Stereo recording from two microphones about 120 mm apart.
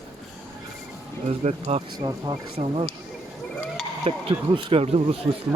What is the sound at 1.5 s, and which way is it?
Speech, 65° right (ahead or behind).